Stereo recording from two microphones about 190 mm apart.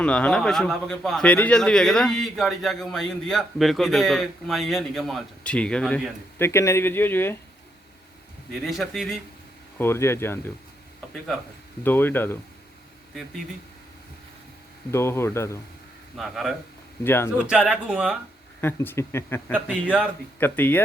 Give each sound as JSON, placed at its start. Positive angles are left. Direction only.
{"t": 0.0, "sound": "speech", "side_deg": 5}
{"t": 8.6, "sound": "speech", "side_deg": 0}
{"t": 9.7, "sound": "speech", "side_deg": 15}
{"t": 11.8, "sound": "speech", "side_deg": 10}
{"t": 14.8, "sound": "speech", "side_deg": 15}
{"t": 16.1, "sound": "speech", "side_deg": 0}
{"t": 17.0, "sound": "speech", "side_deg": 10}
{"t": 17.3, "sound": "speech", "side_deg": -5}
{"t": 18.6, "sound": "speech", "side_deg": 10}
{"t": 19.7, "sound": "speech", "side_deg": -5}
{"t": 20.4, "sound": "speech", "side_deg": 10}